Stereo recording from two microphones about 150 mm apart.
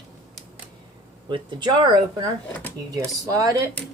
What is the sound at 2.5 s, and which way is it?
Speech, 10° left (ahead or behind).